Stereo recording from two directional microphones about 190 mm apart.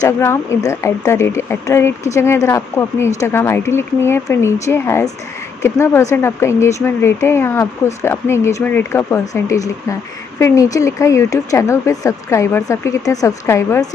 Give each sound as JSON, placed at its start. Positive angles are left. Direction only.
{"t": 0.0, "sound": "speech", "side_deg": 15}